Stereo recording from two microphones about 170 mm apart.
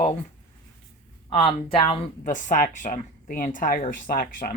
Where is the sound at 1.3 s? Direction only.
30° left (ahead or behind).